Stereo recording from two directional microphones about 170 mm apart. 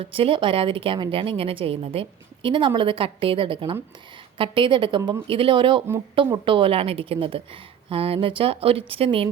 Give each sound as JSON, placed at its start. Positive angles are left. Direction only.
{"t": 0.0, "sound": "a woman's voice", "side_deg": -30}